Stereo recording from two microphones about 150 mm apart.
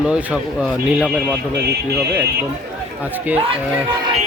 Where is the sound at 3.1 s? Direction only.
10° right (ahead or behind).